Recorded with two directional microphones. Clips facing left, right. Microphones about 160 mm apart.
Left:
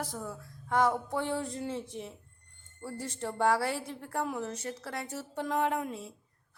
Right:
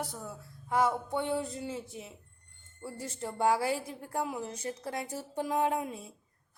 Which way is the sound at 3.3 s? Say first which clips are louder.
Even; 10° right (ahead or behind).